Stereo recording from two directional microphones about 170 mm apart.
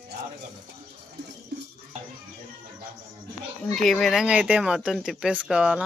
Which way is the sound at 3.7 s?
Centre (ahead or behind).